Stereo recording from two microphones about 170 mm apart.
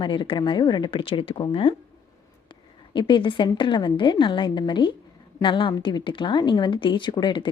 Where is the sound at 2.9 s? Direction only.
30° left (ahead or behind).